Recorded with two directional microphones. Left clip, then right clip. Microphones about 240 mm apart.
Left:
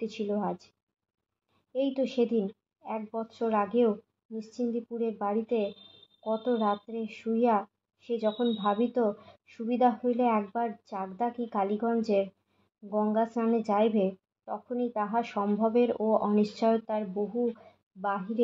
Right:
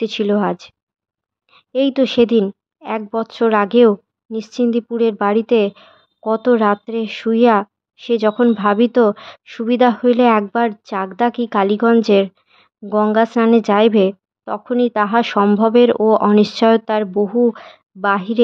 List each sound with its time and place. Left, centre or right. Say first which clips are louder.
0.0 s speech: right 15 dB; right
1.7 s speech: right 14 dB; right